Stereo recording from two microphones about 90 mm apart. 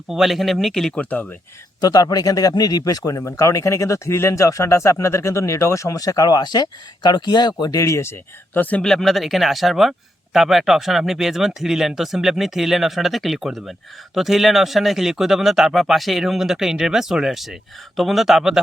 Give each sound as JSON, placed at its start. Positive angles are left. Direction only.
{"t": 0.1, "sound": "speech", "side_deg": -5}
{"t": 1.8, "sound": "speech", "side_deg": 50}
{"t": 7.8, "sound": "speech", "side_deg": 35}
{"t": 8.8, "sound": "speech", "side_deg": 5}